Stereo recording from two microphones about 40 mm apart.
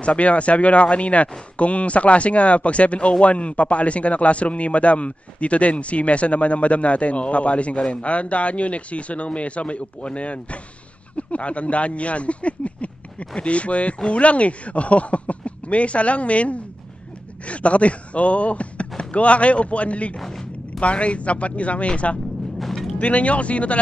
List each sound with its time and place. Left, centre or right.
0.0 s speech: left
20.2 s a sound: centre
20.8 s speech: left